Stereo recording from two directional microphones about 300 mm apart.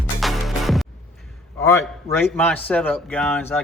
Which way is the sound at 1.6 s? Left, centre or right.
Centre.